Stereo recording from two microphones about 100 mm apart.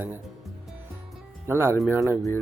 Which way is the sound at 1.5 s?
25° right (ahead or behind).